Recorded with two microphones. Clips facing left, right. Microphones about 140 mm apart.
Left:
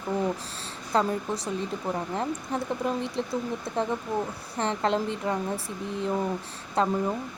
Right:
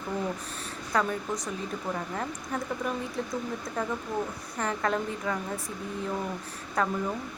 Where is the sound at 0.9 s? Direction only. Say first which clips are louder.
Left 3 dB; 30° left (ahead or behind).